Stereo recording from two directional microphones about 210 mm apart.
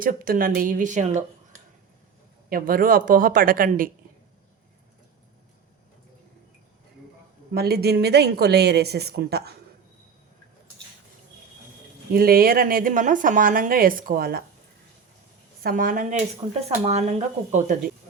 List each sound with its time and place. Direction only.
0.0 s speech: 40° right (ahead or behind)
2.5 s speech: 40° right (ahead or behind)
7.5 s speech: 50° right (ahead or behind)
12.1 s speech: 45° right (ahead or behind)
15.6 s speech: 40° right (ahead or behind)